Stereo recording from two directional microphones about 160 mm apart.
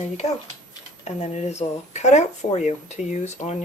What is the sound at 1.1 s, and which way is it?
Speech, 40° left (ahead or behind).